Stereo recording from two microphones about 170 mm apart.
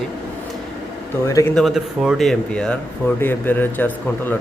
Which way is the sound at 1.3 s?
20° left (ahead or behind).